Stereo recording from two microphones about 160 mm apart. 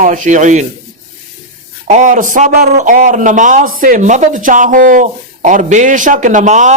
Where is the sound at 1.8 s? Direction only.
50° right (ahead or behind).